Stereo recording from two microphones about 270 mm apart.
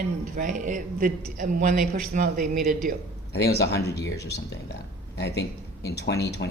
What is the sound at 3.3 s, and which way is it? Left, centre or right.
Speech, left.